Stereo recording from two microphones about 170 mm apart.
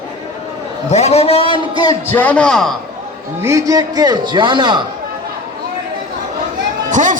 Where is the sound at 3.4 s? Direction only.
15° right (ahead or behind).